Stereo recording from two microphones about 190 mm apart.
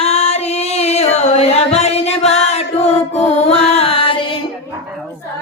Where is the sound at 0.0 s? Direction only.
35° left (ahead or behind).